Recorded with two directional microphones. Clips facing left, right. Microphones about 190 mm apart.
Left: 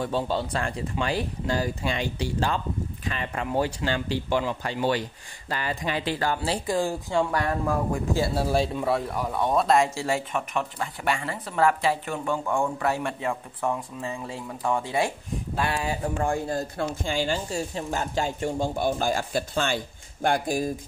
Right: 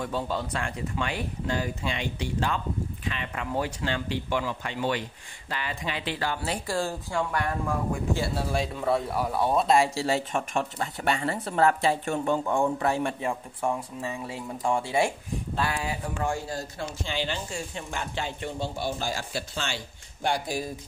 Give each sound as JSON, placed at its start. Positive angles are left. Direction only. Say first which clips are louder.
{"t": 0.0, "sound": "speech", "louder": "left 3 dB", "side_deg": 30}
{"t": 6.7, "sound": "a woman's voice", "louder": "left 5 dB", "side_deg": 15}
{"t": 7.3, "sound": "speech", "louder": "left 3 dB", "side_deg": 40}
{"t": 8.8, "sound": "speech", "louder": "even", "side_deg": -5}
{"t": 9.7, "sound": "speech", "louder": "even", "side_deg": -35}
{"t": 16.3, "sound": "speech", "louder": "left 4 dB", "side_deg": 55}